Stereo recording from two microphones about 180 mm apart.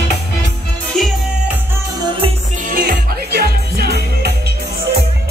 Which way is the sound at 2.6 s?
55° right (ahead or behind).